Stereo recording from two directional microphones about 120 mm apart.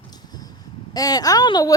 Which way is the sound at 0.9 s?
35° left (ahead or behind).